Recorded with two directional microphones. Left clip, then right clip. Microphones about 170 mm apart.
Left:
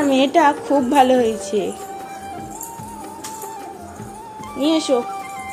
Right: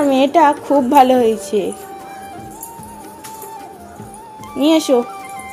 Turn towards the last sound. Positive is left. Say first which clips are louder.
# right 4 dB
turn(degrees=-45)  # may be behind; listen again after turning